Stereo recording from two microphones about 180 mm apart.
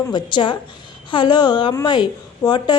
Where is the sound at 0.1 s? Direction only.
25° left (ahead or behind).